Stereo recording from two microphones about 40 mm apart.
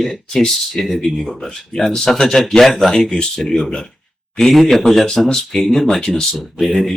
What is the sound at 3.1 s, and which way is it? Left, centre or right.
Speech, left.